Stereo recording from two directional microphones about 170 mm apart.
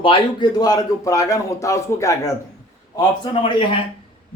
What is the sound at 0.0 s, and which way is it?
A man's voice, 30° left (ahead or behind).